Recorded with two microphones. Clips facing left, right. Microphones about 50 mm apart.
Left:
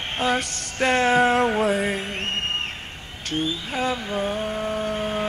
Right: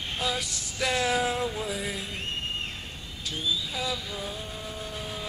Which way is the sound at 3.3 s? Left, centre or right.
Left.